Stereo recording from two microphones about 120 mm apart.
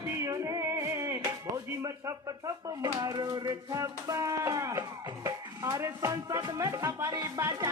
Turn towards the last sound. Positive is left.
turn(degrees=-30)  # may be behind; listen again after turning